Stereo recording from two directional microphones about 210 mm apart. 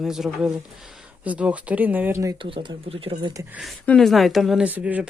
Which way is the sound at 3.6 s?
Centre (ahead or behind).